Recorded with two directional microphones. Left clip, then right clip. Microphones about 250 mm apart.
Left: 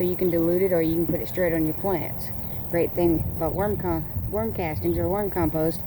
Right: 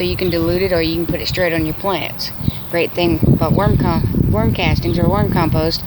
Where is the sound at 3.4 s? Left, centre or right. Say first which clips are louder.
Right 9 dB; right.